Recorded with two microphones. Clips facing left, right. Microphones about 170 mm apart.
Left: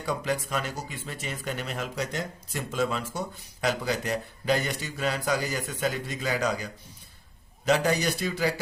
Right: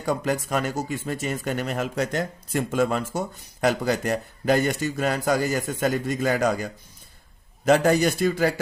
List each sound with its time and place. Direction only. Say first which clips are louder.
0.0 s speech: right 4 dB; 45° right (ahead or behind)